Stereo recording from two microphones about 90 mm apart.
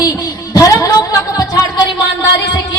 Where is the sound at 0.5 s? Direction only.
40° left (ahead or behind).